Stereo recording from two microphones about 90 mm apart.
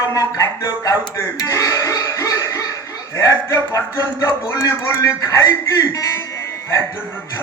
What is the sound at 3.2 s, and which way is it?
A man's voice, 40° left (ahead or behind).